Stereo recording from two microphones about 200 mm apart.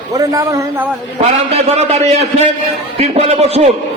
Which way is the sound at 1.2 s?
30° right (ahead or behind).